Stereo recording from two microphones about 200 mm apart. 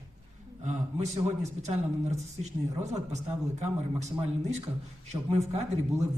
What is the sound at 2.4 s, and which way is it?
Speech, 35° right (ahead or behind).